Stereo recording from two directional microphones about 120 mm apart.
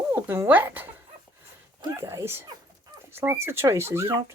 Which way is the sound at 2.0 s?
20° right (ahead or behind).